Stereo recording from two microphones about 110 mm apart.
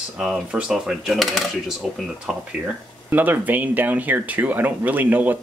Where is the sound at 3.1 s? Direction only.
15° right (ahead or behind).